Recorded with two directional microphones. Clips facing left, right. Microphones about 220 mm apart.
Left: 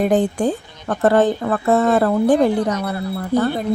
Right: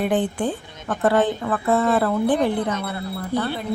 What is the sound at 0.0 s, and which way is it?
Speech, 40° left (ahead or behind).